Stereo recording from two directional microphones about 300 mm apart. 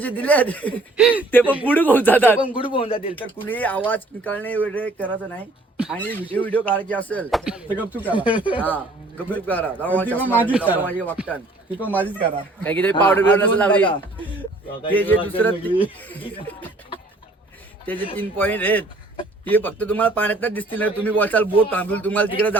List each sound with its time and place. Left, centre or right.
0.0 s speech: centre
2.4 s speech: centre
3.2 s speech: centre
8.1 s speech: centre
9.3 s speech: centre
10.3 s speech: centre
10.8 s speech: centre
17.9 s speech: centre